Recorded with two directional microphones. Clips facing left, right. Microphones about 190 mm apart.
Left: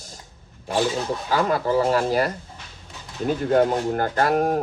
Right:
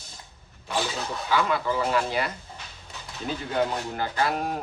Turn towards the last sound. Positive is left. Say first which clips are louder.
# left 7 dB
turn(degrees=45)  # may be behind; listen again after turning